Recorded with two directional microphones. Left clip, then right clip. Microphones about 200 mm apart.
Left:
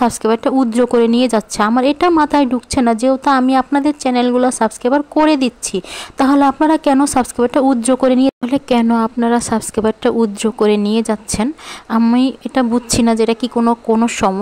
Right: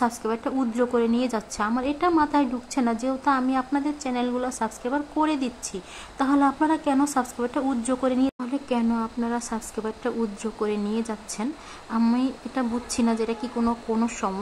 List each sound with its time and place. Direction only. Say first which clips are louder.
0.0 s a woman's voice: left 11 dB; 40° left (ahead or behind)